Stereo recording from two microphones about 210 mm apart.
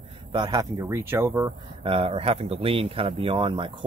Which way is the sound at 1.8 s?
25° right (ahead or behind).